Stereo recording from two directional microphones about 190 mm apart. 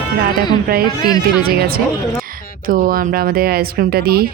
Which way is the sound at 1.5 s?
55° right (ahead or behind).